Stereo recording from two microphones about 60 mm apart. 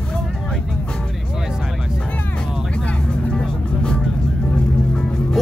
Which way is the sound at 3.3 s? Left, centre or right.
Centre.